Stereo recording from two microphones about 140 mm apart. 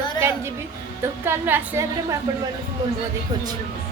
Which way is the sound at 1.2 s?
15° right (ahead or behind).